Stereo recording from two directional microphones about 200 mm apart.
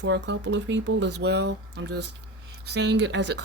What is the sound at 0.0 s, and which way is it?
Speech, 60° right (ahead or behind).